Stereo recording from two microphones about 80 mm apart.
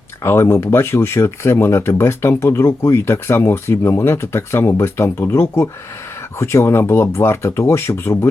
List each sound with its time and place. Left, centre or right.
0.2 s speech: left